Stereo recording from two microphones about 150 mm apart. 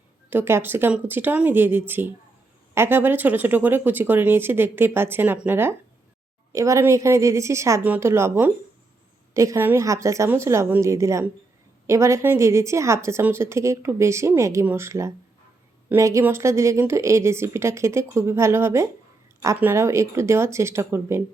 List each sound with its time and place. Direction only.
0.3 s a woman's voice: 15° right (ahead or behind)